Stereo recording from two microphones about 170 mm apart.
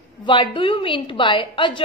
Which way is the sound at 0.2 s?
30° left (ahead or behind).